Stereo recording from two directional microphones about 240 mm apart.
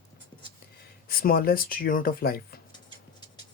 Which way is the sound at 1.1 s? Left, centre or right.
Left.